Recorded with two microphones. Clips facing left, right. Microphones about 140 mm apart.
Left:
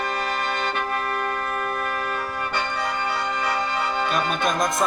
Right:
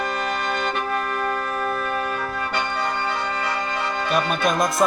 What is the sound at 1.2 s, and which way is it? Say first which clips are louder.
Music: right 2 dB; 35° right (ahead or behind).